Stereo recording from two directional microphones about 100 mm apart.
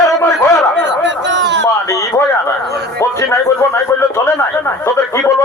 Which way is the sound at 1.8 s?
30° left (ahead or behind).